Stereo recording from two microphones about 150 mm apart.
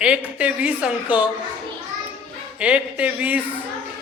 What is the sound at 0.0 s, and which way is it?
A man's voice, 10° right (ahead or behind).